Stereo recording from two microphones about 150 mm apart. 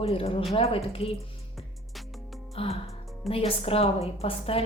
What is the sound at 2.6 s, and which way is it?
A woman's voice, 40° left (ahead or behind).